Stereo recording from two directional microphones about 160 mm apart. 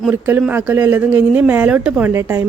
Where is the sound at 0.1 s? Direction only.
10° right (ahead or behind).